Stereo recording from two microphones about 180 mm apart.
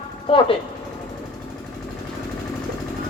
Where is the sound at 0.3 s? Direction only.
30° left (ahead or behind).